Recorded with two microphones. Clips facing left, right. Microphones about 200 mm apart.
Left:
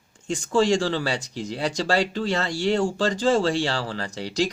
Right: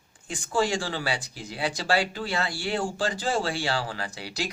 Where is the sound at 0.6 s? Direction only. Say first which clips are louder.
Left 5 dB; 40° left (ahead or behind).